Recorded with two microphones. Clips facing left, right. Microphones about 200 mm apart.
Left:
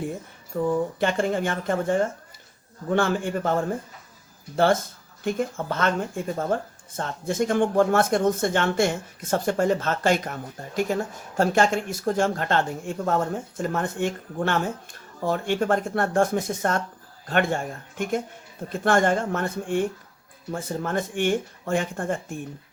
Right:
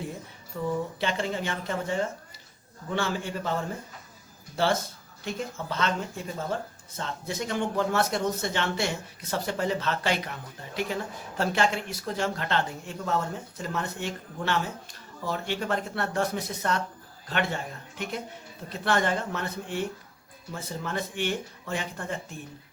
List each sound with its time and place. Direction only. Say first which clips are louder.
0.5 s speech: left 6 dB; 50° left (ahead or behind)